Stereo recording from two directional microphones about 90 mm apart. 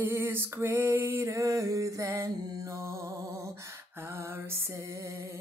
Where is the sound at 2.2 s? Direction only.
40° right (ahead or behind).